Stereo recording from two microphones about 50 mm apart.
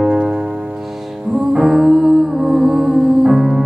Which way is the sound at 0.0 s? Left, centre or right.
Centre.